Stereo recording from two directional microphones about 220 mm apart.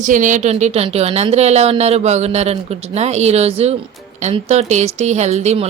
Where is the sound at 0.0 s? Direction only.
35° right (ahead or behind).